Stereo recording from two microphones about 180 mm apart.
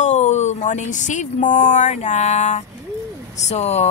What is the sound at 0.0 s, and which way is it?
Speech, 40° left (ahead or behind).